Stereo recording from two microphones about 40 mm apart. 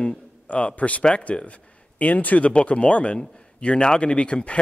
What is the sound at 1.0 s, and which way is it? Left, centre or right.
Speech, left.